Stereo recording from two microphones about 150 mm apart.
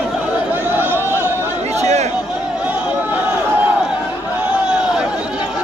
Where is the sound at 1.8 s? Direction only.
45° right (ahead or behind).